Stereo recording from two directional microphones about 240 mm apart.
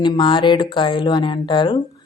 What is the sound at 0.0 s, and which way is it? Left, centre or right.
Speech, centre.